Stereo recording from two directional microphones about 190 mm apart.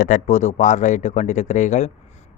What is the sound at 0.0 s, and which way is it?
Speech, 40° left (ahead or behind).